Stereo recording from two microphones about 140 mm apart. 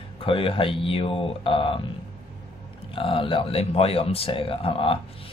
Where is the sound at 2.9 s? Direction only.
40° left (ahead or behind).